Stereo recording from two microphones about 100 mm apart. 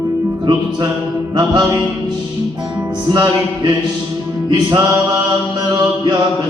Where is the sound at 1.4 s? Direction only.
40° right (ahead or behind).